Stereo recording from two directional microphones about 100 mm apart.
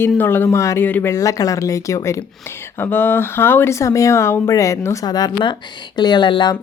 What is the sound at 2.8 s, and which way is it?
Speech, 20° left (ahead or behind).